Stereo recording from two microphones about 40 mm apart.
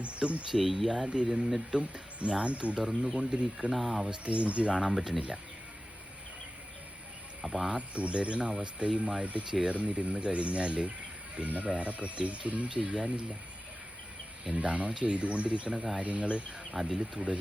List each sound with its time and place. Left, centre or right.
0.0 s speech: right
0.5 s speech: centre
1.0 s speech: right
3.7 s speech: centre
4.1 s speech: right
4.9 s speech: centre
7.4 s speech: centre
7.7 s speech: right
12.6 s speech: right
14.5 s speech: right
16.7 s speech: centre